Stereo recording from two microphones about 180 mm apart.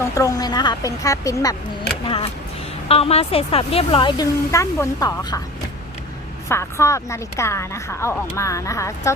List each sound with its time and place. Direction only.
0.1 s speech: 20° left (ahead or behind)
2.0 s speech: 30° left (ahead or behind)
6.5 s speech: 15° left (ahead or behind)